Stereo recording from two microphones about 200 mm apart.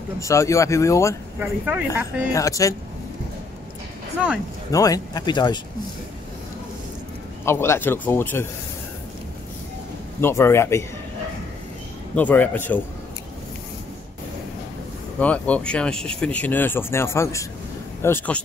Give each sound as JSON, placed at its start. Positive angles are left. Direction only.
{"t": 0.2, "sound": "speech", "side_deg": 15}
{"t": 1.4, "sound": "speech", "side_deg": -5}
{"t": 2.3, "sound": "speech", "side_deg": 15}
{"t": 4.6, "sound": "speech", "side_deg": 15}
{"t": 7.4, "sound": "speech", "side_deg": 15}
{"t": 10.2, "sound": "speech", "side_deg": 10}
{"t": 12.2, "sound": "speech", "side_deg": 10}
{"t": 15.1, "sound": "speech", "side_deg": 5}